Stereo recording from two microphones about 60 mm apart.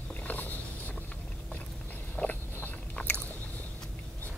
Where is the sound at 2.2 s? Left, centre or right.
Left.